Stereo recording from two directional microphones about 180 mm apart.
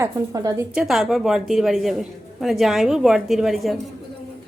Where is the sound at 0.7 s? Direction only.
5° right (ahead or behind).